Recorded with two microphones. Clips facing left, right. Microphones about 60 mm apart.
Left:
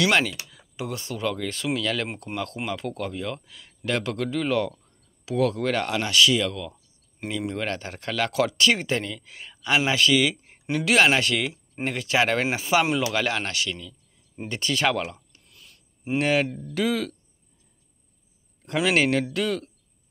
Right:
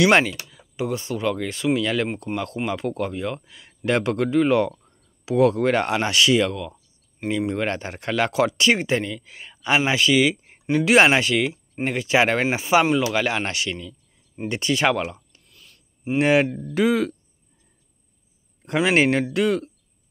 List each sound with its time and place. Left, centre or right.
0.0 s speech: centre
0.5 s speech: centre
2.0 s speech: centre
13.4 s speech: right
15.0 s a sound: centre
16.2 s speech: centre
18.7 s speech: right